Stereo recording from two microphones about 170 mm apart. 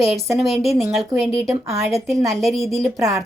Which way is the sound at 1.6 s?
15° right (ahead or behind).